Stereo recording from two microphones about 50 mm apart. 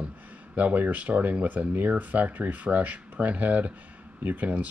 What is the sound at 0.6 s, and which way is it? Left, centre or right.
Speech, right.